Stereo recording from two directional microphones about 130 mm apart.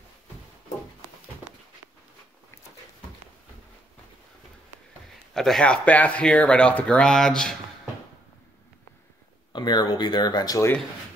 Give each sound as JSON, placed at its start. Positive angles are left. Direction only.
{"t": 5.3, "sound": "speech", "side_deg": 5}
{"t": 9.5, "sound": "speech", "side_deg": 35}